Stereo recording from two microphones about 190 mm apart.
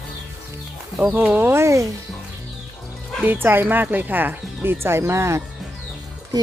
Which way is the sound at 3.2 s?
10° right (ahead or behind).